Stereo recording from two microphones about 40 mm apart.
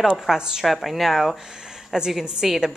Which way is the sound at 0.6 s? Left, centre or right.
Centre.